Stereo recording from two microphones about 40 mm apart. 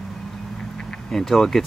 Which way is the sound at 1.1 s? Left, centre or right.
Centre.